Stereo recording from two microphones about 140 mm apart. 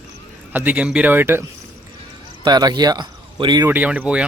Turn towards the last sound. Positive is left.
turn(degrees=-10)  # may be behind; listen again after turning